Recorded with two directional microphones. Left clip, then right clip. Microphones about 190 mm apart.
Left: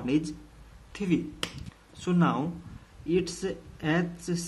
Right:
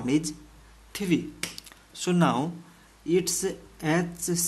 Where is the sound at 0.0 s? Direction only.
25° right (ahead or behind).